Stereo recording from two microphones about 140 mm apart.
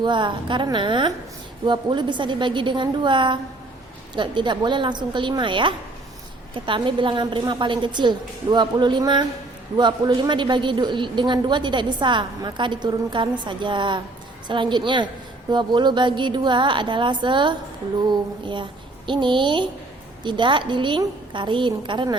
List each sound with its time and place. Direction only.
0.0 s a woman's voice: 35° right (ahead or behind)